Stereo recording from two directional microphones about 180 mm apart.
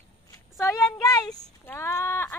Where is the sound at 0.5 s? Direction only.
20° left (ahead or behind).